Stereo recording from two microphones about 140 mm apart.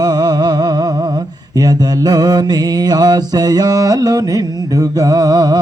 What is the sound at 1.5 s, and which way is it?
Mantra, 30° right (ahead or behind).